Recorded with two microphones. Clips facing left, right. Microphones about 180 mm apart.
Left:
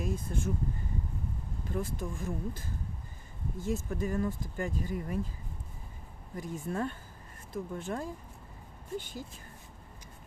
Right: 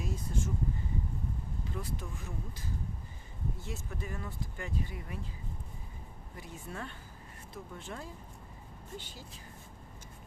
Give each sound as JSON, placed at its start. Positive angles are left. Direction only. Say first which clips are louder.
{"t": 0.0, "sound": "speech", "louder": "left 3 dB", "side_deg": 55}
{"t": 1.7, "sound": "speech", "louder": "left 8 dB", "side_deg": 50}
{"t": 6.3, "sound": "speech", "louder": "left 9 dB", "side_deg": 45}